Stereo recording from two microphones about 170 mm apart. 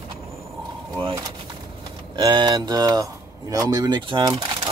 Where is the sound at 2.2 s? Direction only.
30° right (ahead or behind).